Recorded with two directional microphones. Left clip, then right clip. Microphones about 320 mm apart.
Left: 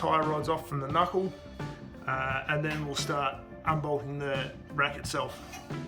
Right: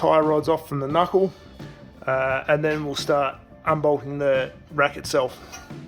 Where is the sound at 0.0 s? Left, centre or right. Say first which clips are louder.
Right 9 dB; centre.